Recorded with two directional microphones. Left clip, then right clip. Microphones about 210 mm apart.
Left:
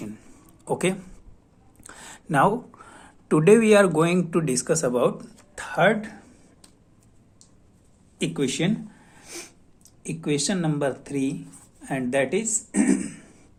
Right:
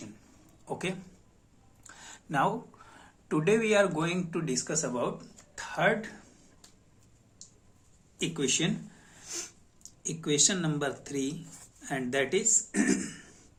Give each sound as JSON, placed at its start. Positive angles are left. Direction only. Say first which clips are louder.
{"t": 0.6, "sound": "speech", "louder": "left 10 dB", "side_deg": 50}
{"t": 8.2, "sound": "speech", "louder": "left 4 dB", "side_deg": 35}
{"t": 13.0, "sound": "throat clearing", "louder": "left 5 dB", "side_deg": 25}